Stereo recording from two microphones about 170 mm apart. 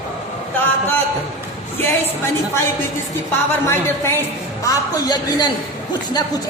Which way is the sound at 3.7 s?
15° left (ahead or behind).